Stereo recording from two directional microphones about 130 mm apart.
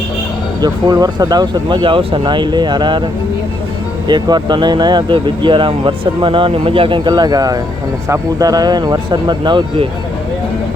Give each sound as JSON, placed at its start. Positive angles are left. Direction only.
{"t": 0.6, "sound": "speech", "side_deg": -30}
{"t": 4.1, "sound": "speech", "side_deg": -35}